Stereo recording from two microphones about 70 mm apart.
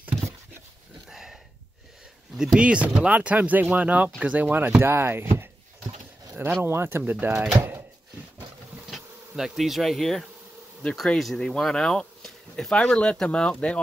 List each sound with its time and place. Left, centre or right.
1.1 s a sound: centre
2.3 s speech: centre; by 5.5 s right
6.6 s speech: right
8.9 s bee: centre
11.1 s speech: centre